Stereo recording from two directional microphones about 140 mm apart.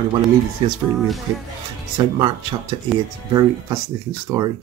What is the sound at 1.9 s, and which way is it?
Speech, 30° right (ahead or behind).